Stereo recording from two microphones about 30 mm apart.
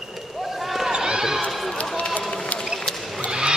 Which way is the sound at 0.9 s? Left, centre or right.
Right.